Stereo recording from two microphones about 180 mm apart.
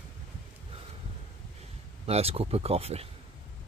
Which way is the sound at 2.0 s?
35° right (ahead or behind).